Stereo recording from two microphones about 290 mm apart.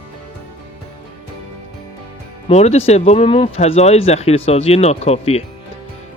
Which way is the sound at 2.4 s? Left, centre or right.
Left.